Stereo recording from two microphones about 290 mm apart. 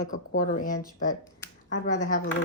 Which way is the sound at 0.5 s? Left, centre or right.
Left.